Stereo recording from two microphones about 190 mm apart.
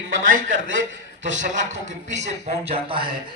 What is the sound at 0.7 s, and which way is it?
Speech, 90° right.